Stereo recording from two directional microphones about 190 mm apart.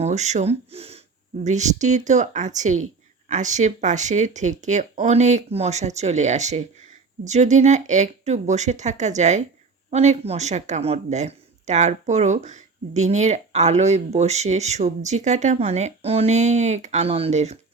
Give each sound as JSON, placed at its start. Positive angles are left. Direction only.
{"t": 0.0, "sound": "speech", "side_deg": -35}